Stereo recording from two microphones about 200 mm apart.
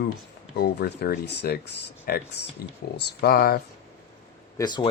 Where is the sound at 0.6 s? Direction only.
55° left (ahead or behind).